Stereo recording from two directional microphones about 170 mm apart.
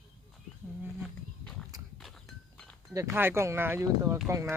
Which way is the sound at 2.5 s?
5° left (ahead or behind).